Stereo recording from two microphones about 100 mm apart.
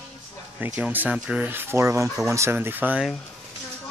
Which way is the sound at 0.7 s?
15° right (ahead or behind).